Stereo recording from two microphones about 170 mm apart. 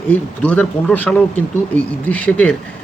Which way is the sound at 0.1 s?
10° left (ahead or behind).